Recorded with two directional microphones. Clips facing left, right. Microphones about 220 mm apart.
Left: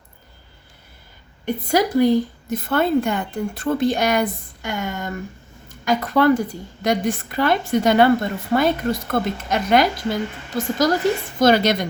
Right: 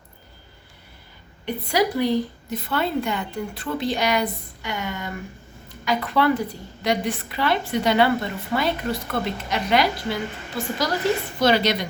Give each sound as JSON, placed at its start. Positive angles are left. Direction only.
{"t": 1.5, "sound": "a woman's voice", "side_deg": 45}